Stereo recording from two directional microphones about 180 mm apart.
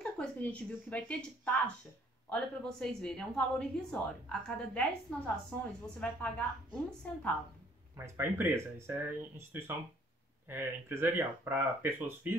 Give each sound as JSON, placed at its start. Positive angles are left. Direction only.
{"t": 0.0, "sound": "a woman's voice", "side_deg": 5}
{"t": 8.0, "sound": "speech", "side_deg": -15}